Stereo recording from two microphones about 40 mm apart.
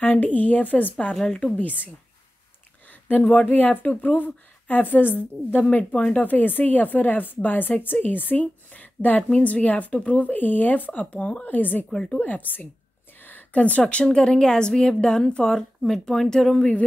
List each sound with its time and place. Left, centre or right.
0.0 s a woman's voice: left
2.9 s a sound: left
3.4 s a woman's voice: left
5.6 s a woman's voice: left
6.1 s a woman's voice: left
10.9 s a woman's voice: left
11.4 s a woman's voice: left
11.9 s speech: centre
12.2 s a woman's voice: left
13.2 s a sound: left
14.0 s a woman's voice: centre
15.8 s speech: centre